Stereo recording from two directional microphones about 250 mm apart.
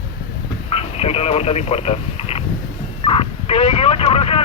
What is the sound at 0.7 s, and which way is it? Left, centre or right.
Speech, left.